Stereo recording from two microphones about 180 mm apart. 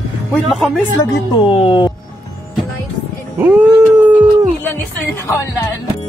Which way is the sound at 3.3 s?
10° right (ahead or behind).